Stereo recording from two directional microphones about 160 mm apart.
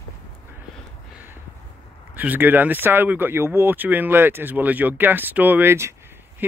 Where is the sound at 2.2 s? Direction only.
10° right (ahead or behind).